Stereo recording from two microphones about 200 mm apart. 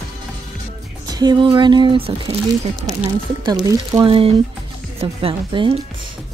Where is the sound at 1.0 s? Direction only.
20° right (ahead or behind).